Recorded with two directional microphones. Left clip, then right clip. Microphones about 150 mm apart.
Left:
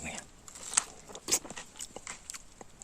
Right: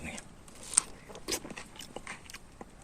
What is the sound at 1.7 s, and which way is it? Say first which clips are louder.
Biting: right 1 dB; 5° left (ahead or behind).